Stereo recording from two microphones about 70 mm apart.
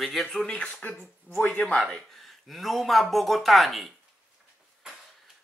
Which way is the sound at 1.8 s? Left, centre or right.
Centre.